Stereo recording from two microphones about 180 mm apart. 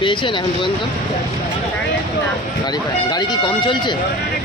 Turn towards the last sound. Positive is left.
turn(degrees=25)  # may be behind; listen again after turning